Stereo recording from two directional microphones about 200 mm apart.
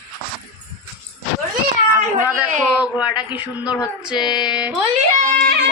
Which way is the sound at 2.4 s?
5° right (ahead or behind).